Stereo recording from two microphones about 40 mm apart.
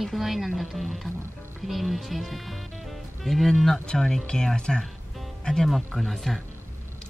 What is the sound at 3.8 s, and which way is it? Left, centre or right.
Speech, centre.